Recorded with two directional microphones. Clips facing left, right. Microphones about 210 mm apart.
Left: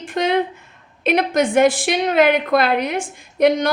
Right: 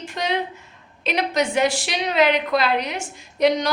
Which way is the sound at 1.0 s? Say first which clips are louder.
Left 5 dB; 50° left (ahead or behind).